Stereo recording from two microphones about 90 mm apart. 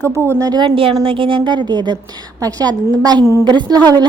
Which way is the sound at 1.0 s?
80° right.